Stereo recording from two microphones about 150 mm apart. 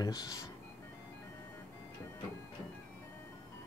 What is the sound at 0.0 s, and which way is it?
Speech, 25° left (ahead or behind).